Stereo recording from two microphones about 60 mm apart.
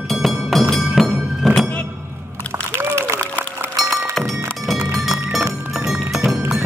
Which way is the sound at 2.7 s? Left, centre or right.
Right.